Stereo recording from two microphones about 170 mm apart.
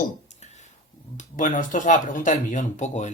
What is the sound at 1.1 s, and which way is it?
Speech, 50° left (ahead or behind).